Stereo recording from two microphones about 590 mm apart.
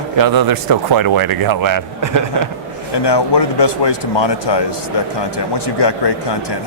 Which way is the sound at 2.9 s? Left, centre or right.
Left.